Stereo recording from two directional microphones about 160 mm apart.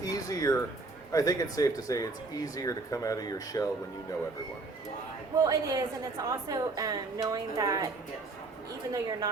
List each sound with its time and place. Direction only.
0.0 s a sound: 20° left (ahead or behind)
1.1 s speech: 20° left (ahead or behind)
5.4 s a woman's voice: 20° right (ahead or behind)
8.9 s a woman's voice: 20° right (ahead or behind)